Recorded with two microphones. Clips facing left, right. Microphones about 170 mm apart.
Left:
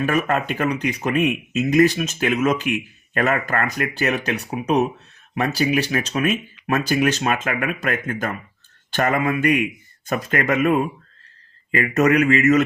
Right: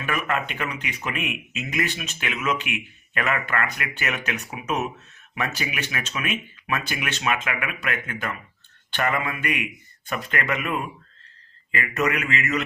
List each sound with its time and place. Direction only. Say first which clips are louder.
0.0 s speech: left 6 dB; 40° left (ahead or behind)